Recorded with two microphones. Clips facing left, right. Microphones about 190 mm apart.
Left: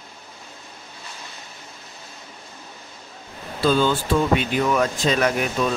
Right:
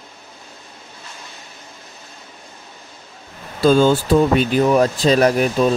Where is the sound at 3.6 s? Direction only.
45° right (ahead or behind).